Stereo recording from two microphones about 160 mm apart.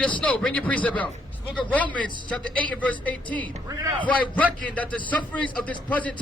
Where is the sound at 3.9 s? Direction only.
10° left (ahead or behind).